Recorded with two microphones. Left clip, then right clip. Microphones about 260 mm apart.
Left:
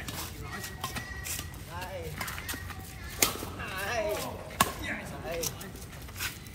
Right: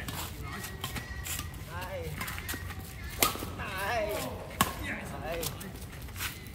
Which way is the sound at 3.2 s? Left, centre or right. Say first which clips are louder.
Even; right.